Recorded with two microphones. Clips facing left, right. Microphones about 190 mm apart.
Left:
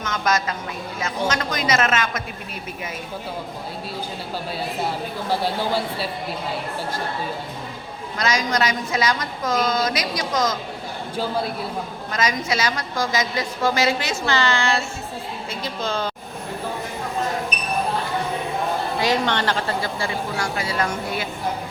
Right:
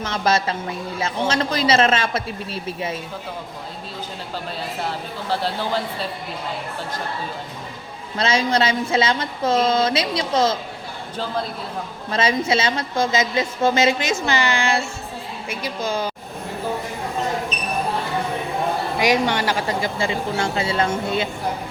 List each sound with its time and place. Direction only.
0.0 s a woman's voice: 30° right (ahead or behind)
4.8 s a woman's voice: 10° left (ahead or behind)
8.2 s a woman's voice: 30° right (ahead or behind)
11.2 s a woman's voice: 10° left (ahead or behind)
12.1 s a woman's voice: 30° right (ahead or behind); by 16.0 s 10° right (ahead or behind)
18.9 s speech: 15° right (ahead or behind)